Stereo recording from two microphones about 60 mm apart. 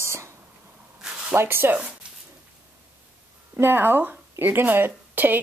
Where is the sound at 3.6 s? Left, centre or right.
Right.